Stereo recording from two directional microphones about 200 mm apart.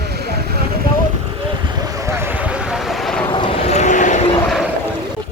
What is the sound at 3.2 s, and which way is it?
Vehicle, 25° left (ahead or behind).